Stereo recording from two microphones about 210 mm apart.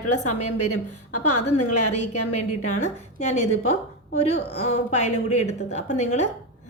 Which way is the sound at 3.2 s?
30° left (ahead or behind).